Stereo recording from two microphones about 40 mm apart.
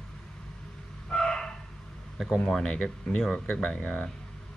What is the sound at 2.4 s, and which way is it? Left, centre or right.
Speech, centre.